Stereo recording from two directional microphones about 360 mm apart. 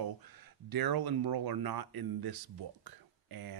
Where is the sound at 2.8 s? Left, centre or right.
Right.